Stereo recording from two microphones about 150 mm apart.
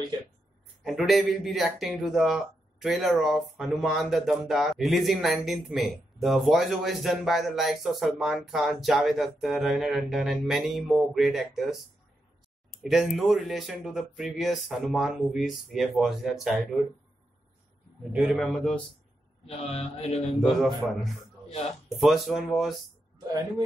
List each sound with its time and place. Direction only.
0.8 s speech: centre (ahead or behind)
12.8 s speech: centre (ahead or behind)
18.1 s speech: centre (ahead or behind)
19.4 s speech: 40° left (ahead or behind)
20.3 s speech: centre (ahead or behind)
21.5 s speech: 45° left (ahead or behind)
21.8 s speech: centre (ahead or behind)